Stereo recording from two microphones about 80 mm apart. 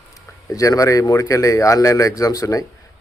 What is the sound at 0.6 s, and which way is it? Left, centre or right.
A man's voice, left.